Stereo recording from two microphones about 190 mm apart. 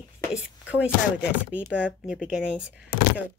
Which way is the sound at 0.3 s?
5° right (ahead or behind).